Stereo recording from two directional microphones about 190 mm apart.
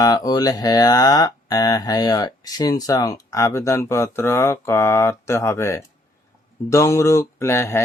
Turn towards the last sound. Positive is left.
turn(degrees=15)  # may be behind; listen again after turning